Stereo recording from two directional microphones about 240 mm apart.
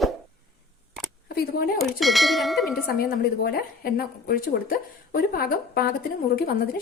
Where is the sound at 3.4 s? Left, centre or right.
Left.